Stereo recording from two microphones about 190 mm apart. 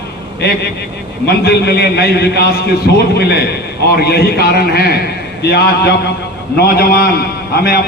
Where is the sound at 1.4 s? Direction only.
60° left (ahead or behind).